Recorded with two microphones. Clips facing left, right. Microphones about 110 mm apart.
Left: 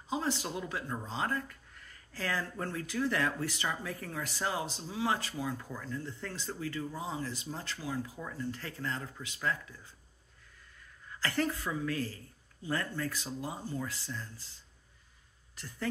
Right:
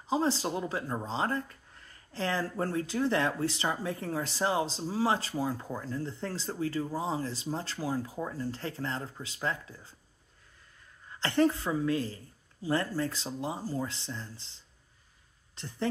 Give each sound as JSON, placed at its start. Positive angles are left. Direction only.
{"t": 0.1, "sound": "speech", "side_deg": -30}
{"t": 11.1, "sound": "speech", "side_deg": -25}